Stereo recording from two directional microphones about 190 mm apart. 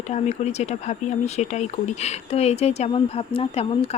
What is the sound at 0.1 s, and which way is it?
Speech, 35° left (ahead or behind).